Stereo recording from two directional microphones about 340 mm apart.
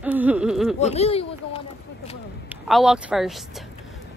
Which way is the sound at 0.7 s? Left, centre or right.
Centre.